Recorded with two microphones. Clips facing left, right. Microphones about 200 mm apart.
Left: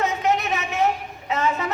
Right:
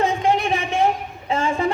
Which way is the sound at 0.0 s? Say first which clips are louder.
Right 3 dB; 30° right (ahead or behind).